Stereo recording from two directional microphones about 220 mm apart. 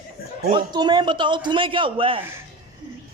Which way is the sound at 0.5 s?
20° right (ahead or behind).